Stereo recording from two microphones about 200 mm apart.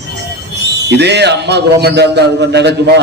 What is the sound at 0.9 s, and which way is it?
A man's voice, 60° right (ahead or behind).